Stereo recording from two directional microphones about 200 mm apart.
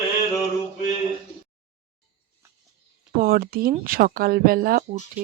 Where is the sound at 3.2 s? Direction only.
50° right (ahead or behind).